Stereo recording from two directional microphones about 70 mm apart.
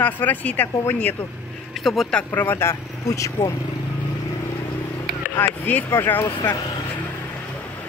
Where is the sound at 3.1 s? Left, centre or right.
Left.